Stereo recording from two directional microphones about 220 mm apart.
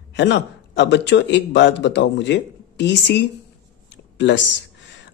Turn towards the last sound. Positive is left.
turn(degrees=55)  # may be behind; listen again after turning